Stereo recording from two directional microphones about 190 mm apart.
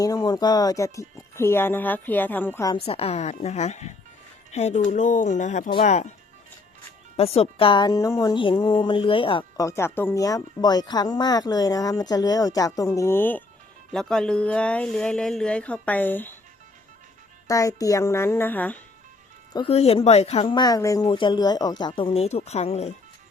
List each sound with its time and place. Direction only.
0.0 s speech: 20° left (ahead or behind)
2.8 s speech: 30° left (ahead or behind)
7.2 s speech: 30° left (ahead or behind)
9.4 s speech: 15° left (ahead or behind)
17.5 s speech: 15° left (ahead or behind)
19.5 s speech: 30° left (ahead or behind)